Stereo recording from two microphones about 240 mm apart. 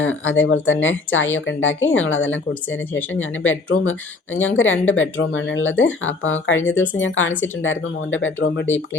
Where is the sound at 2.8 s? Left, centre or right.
Centre.